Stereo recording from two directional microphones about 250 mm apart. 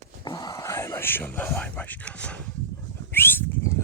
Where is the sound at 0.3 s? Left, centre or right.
Centre.